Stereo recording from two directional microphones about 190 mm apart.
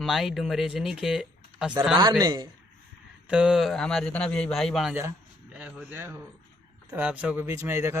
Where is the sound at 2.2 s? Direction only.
20° right (ahead or behind).